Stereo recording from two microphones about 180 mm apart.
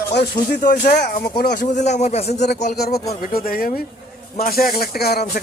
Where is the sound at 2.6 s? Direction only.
50° left (ahead or behind).